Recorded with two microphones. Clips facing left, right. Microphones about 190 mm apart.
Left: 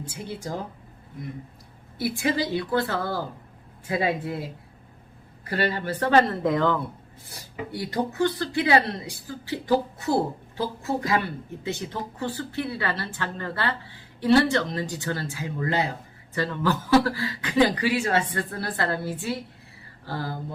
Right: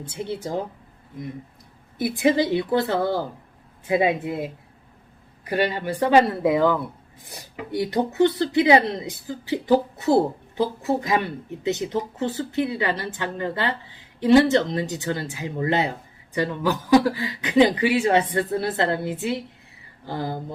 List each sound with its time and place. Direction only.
0.0 s speech: 20° right (ahead or behind)
2.0 s speech: 20° right (ahead or behind)
7.3 s speech: 20° right (ahead or behind)